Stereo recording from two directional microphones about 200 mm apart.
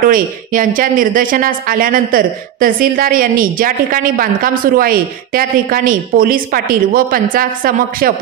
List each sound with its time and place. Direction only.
0.0 s speech: 45° right (ahead or behind)